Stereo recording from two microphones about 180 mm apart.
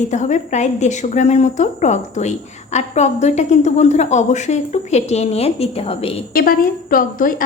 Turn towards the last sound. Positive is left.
turn(degrees=50)  # may be behind; listen again after turning